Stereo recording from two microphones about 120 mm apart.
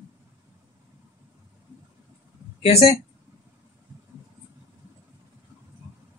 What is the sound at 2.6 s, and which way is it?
Speech, 60° left (ahead or behind).